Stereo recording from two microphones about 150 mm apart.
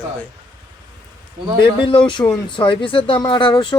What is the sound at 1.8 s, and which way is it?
Speech, 35° left (ahead or behind).